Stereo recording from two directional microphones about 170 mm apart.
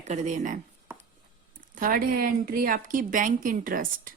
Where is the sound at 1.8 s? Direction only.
55° right (ahead or behind).